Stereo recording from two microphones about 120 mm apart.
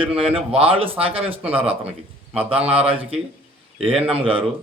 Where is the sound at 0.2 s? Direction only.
55° right (ahead or behind).